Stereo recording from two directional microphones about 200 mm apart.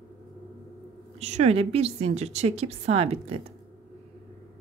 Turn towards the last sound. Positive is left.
turn(degrees=-30)  # may be behind; listen again after turning